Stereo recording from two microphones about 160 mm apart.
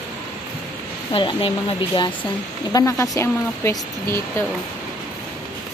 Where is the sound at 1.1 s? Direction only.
30° left (ahead or behind).